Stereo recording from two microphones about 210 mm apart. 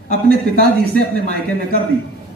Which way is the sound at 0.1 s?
50° right (ahead or behind).